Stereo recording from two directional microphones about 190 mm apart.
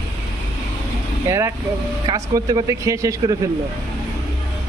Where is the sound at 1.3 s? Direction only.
15° right (ahead or behind).